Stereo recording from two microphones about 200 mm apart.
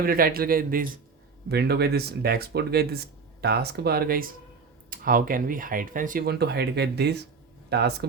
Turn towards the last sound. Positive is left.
turn(degrees=-55)  # may be behind; listen again after turning